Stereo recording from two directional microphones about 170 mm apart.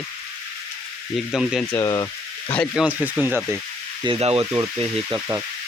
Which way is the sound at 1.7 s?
20° left (ahead or behind).